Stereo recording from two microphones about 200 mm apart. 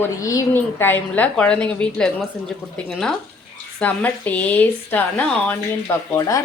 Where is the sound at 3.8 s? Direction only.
5° left (ahead or behind).